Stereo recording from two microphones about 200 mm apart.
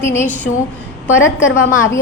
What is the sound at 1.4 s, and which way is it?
Speech, 75° left (ahead or behind).